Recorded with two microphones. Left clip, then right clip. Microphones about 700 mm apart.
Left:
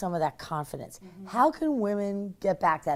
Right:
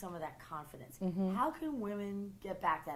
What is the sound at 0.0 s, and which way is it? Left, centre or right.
A woman's voice, left.